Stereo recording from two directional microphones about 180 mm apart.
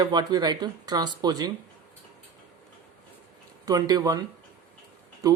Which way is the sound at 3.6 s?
20° right (ahead or behind).